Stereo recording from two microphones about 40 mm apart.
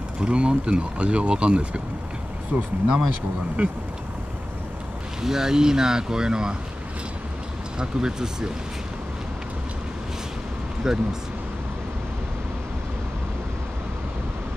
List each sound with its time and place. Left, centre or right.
0.2 s speech: right
5.2 s speech: centre
7.8 s speech: centre
10.8 s speech: centre